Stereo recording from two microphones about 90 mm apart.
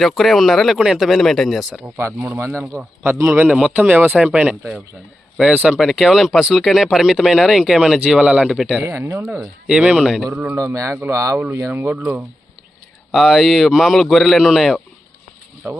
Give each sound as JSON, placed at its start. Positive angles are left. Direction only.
{"t": 0.0, "sound": "speech", "side_deg": 0}
{"t": 1.8, "sound": "speech", "side_deg": -25}
{"t": 5.5, "sound": "speech", "side_deg": -10}
{"t": 8.8, "sound": "speech", "side_deg": -25}
{"t": 9.6, "sound": "speech", "side_deg": -10}
{"t": 10.5, "sound": "speech", "side_deg": -30}
{"t": 13.1, "sound": "speech", "side_deg": 0}
{"t": 15.6, "sound": "speech", "side_deg": -25}